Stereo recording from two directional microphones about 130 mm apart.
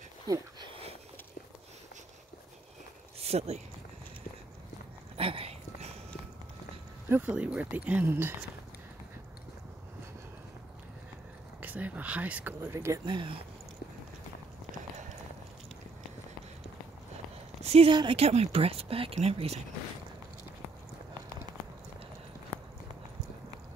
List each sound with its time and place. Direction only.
3.2 s speech: 55° right (ahead or behind)
5.1 s a sound: 45° right (ahead or behind)
7.1 s speech: 15° right (ahead or behind)
11.6 s speech: 10° right (ahead or behind)
13.0 s speech: 40° right (ahead or behind)
17.6 s a sound: 50° right (ahead or behind)
17.9 s speech: 45° right (ahead or behind)